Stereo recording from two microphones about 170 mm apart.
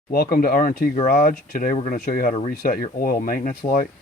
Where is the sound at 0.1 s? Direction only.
65° left (ahead or behind).